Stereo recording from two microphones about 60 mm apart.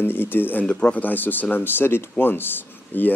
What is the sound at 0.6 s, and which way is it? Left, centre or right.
Speech, left.